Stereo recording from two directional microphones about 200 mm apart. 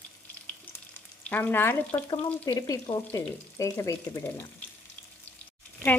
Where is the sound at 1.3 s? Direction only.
10° left (ahead or behind).